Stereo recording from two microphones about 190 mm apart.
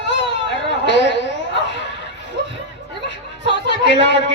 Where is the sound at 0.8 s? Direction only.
70° left (ahead or behind).